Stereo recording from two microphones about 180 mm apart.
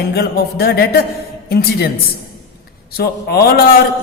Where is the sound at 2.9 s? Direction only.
60° left (ahead or behind).